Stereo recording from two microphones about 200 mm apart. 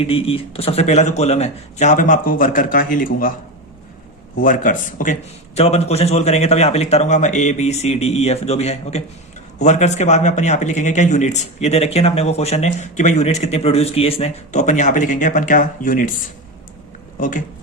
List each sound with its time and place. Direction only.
0.0 s speech: 30° left (ahead or behind)
4.4 s speech: 40° left (ahead or behind)
17.2 s a man's voice: 40° left (ahead or behind)